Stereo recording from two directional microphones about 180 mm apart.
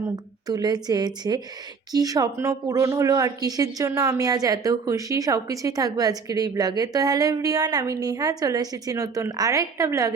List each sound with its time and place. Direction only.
0.4 s speech: 20° right (ahead or behind)